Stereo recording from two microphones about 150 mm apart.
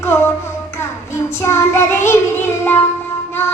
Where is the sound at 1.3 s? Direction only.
20° left (ahead or behind).